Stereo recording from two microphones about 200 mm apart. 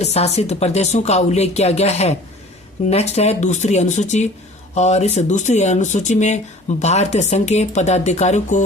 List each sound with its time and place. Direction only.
0.0 s speech: 30° left (ahead or behind)